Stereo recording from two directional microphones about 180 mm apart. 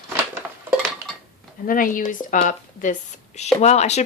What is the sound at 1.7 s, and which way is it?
A woman's voice, 50° left (ahead or behind).